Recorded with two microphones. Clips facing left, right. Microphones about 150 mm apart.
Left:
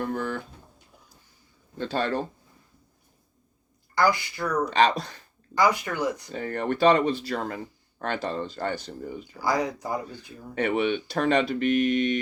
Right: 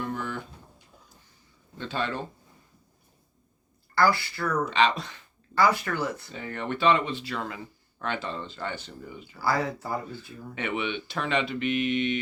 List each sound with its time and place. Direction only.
0.0 s speech: 45° left (ahead or behind)
1.8 s speech: 40° left (ahead or behind)
3.9 s speech: 15° left (ahead or behind)
4.6 s speech: 40° left (ahead or behind)
5.5 s speech: 15° left (ahead or behind)
6.3 s speech: 45° left (ahead or behind)
9.4 s speech: 15° left (ahead or behind)
10.5 s speech: 40° left (ahead or behind)